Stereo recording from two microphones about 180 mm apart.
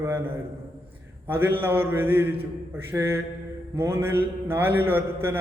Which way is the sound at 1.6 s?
10° right (ahead or behind).